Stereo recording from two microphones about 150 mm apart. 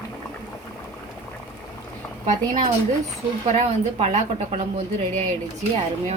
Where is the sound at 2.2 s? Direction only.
55° right (ahead or behind).